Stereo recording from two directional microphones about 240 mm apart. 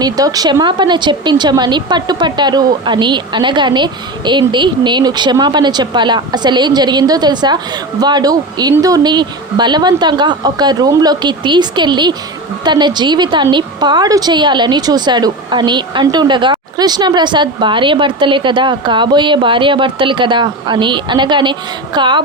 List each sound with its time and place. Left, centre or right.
0.0 s a woman's voice: centre